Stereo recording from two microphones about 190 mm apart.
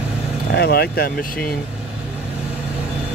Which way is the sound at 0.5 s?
55° left (ahead or behind).